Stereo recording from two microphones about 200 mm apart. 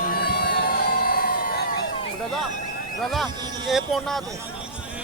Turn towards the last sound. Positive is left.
turn(degrees=0)  # may be behind; listen again after turning